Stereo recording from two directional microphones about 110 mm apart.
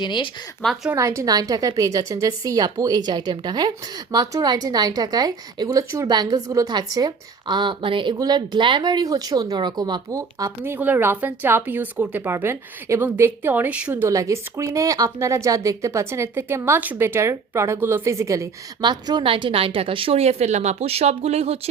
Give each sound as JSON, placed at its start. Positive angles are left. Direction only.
{"t": 0.0, "sound": "speech", "side_deg": 45}
{"t": 0.6, "sound": "a woman's voice", "side_deg": 5}
{"t": 0.9, "sound": "a woman's voice", "side_deg": -30}
{"t": 10.6, "sound": "speech", "side_deg": -15}
{"t": 14.1, "sound": "speech", "side_deg": -30}
{"t": 18.8, "sound": "a woman's voice", "side_deg": -45}